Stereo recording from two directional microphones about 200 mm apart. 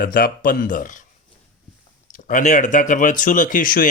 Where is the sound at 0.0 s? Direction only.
45° left (ahead or behind).